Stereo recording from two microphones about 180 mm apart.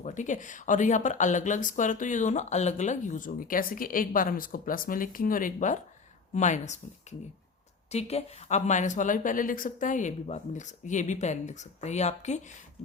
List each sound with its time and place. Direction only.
0.0 s a woman's voice: 45° left (ahead or behind)